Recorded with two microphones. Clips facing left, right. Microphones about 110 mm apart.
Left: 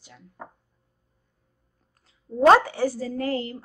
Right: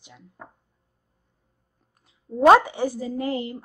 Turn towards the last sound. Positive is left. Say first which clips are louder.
# even
turn(degrees=-15)  # may be behind; listen again after turning